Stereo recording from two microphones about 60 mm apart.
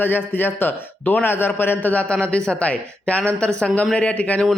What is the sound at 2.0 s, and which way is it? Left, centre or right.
A man's voice, centre.